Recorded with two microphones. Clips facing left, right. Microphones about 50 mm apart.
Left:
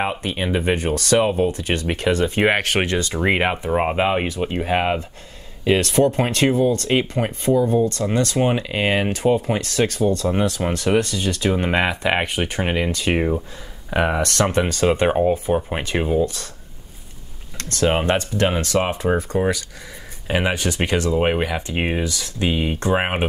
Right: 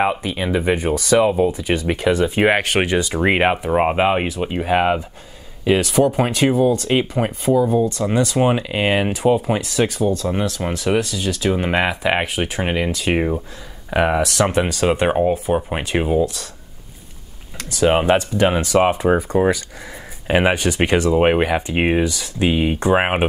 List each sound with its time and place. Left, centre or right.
0.4 s speech: centre
0.7 s speech: centre
17.6 s speech: centre